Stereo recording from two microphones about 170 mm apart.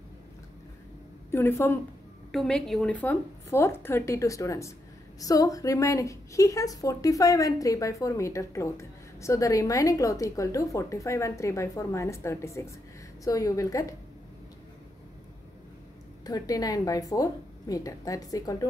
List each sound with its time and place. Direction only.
1.3 s a woman's voice: 15° left (ahead or behind)
2.3 s a woman's voice: 5° left (ahead or behind); by 13.9 s 20° left (ahead or behind)
16.3 s a woman's voice: 20° left (ahead or behind)